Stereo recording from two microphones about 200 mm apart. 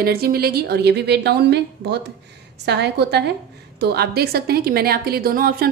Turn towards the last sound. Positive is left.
turn(degrees=-50)  # may be behind; listen again after turning